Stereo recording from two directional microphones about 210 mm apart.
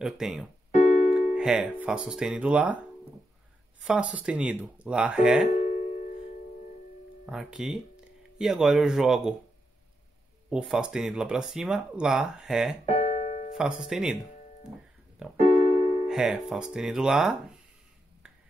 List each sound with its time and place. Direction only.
0.0 s speech: centre (ahead or behind)
0.7 s keyboard: 35° left (ahead or behind)
1.3 s speech: 5° right (ahead or behind)
3.8 s speech: 5° right (ahead or behind)
5.6 s music: 40° left (ahead or behind)
7.2 s speech: centre (ahead or behind)
10.5 s speech: 5° right (ahead or behind)
12.9 s keyboard: 35° left (ahead or behind)
13.6 s speech: 5° right (ahead or behind)
15.3 s keyboard: 40° left (ahead or behind)
16.1 s speech: centre (ahead or behind)